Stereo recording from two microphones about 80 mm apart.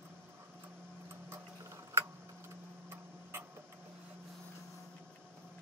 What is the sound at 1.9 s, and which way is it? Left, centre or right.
Tick-tock, right.